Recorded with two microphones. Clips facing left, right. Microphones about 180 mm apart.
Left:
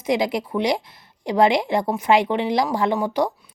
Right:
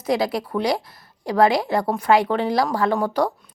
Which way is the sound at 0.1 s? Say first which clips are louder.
Even; 20° left (ahead or behind).